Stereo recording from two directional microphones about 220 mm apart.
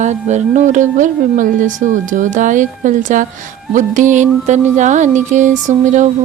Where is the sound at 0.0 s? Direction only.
30° right (ahead or behind).